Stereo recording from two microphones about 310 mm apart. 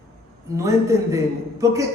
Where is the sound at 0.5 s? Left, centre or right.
Centre.